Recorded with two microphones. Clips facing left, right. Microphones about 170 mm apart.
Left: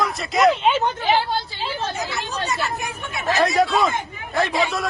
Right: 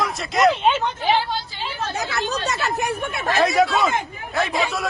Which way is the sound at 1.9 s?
80° right.